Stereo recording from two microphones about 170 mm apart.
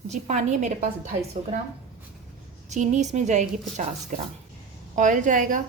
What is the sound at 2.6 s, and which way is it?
A woman's voice, 45° right (ahead or behind).